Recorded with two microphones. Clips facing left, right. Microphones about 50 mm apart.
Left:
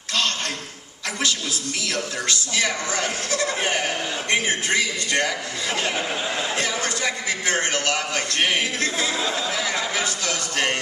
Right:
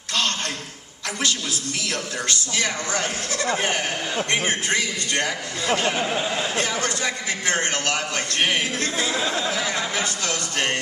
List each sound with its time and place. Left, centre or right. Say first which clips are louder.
0.1 s a sound: even; right
1.9 s speech: left 1 dB; right
2.6 s a man's voice: left 1 dB; left
5.6 s speech: right 4 dB; right
6.0 s speech: right 2 dB; centre
6.6 s speech: right 1 dB; right
7.0 s a man's voice: left 1 dB; left
7.7 s speech: left 1 dB; right
8.1 s a man's voice: even; left
9.6 s chatter: even; left